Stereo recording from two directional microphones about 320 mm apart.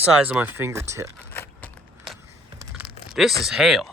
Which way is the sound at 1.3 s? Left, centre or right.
Centre.